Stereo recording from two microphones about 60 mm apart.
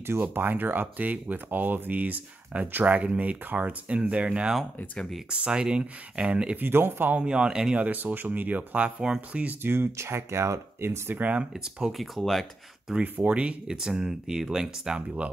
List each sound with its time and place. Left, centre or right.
0.3 s speech: right
6.6 s speech: right
7.2 s speech: centre
7.8 s speech: right
9.6 s speech: right
9.9 s speech: right
11.1 s speech: right
11.5 s speech: centre
11.9 s speech: centre
13.0 s speech: right